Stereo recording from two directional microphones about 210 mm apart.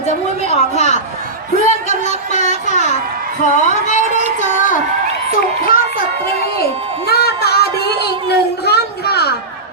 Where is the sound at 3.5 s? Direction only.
35° left (ahead or behind).